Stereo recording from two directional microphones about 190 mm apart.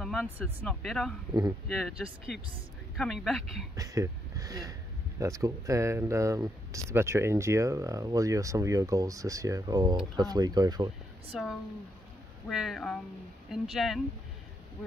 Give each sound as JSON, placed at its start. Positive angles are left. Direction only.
{"t": 0.0, "sound": "speech", "side_deg": 0}
{"t": 3.7, "sound": "speech", "side_deg": -15}
{"t": 11.3, "sound": "speech", "side_deg": -5}